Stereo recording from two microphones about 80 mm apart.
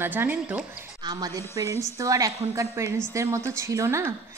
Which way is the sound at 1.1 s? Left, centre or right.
Right.